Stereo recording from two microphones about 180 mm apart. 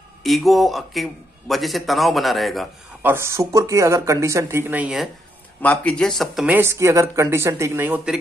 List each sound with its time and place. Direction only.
0.2 s a man's voice: centre (ahead or behind)
3.0 s speech: 15° right (ahead or behind)
5.6 s speech: 10° left (ahead or behind); by 8.2 s 5° right (ahead or behind)